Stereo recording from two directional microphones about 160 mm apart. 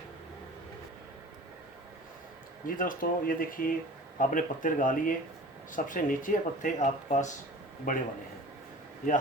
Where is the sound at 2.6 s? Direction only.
60° left (ahead or behind).